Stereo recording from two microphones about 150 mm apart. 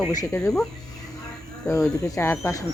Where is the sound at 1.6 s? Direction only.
20° left (ahead or behind).